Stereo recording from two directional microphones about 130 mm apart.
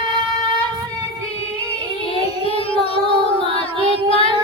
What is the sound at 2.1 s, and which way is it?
Child singing, 50° left (ahead or behind).